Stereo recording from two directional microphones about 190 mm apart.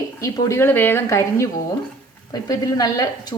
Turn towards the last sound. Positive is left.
turn(degrees=20)  # may be behind; listen again after turning